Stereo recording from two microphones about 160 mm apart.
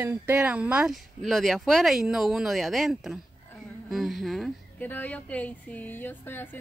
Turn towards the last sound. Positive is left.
turn(degrees=10)  # may be behind; listen again after turning